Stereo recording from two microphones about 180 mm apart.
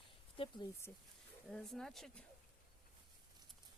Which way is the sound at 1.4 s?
5° left (ahead or behind).